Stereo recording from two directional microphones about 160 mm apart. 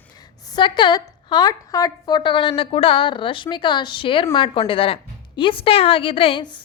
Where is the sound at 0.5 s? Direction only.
30° left (ahead or behind).